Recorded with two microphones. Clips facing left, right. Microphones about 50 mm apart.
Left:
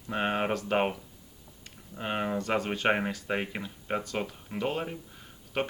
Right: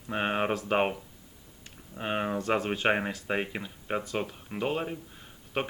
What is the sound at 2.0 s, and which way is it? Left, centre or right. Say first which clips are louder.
Speech: even; centre.